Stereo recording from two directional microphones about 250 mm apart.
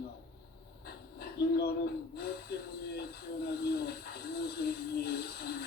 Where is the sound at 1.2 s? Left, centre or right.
Left.